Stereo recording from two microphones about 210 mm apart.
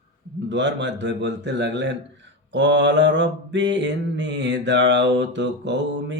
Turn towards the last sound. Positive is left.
turn(degrees=-55)  # may be behind; listen again after turning